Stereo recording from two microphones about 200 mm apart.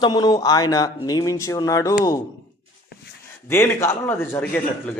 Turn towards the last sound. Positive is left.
turn(degrees=10)  # may be behind; listen again after turning